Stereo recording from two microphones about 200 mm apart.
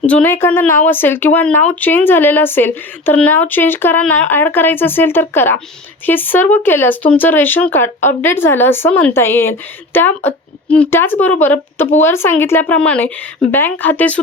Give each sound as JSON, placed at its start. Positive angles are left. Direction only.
{"t": 0.0, "sound": "speech", "side_deg": 5}